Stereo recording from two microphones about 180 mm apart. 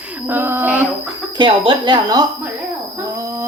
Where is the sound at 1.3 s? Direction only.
30° right (ahead or behind).